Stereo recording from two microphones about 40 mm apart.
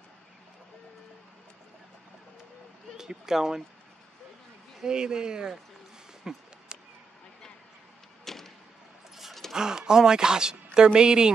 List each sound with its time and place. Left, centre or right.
3.0 s speech: centre
4.8 s speech: centre
8.3 s a sound: centre
9.5 s speech: centre